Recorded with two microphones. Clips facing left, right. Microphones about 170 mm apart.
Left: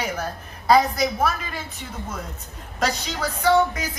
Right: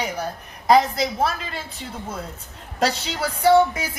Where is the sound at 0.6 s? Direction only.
25° right (ahead or behind).